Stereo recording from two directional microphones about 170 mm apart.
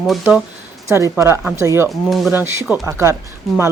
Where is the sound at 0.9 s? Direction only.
15° right (ahead or behind).